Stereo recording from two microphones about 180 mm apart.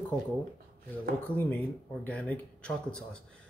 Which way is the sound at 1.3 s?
10° left (ahead or behind).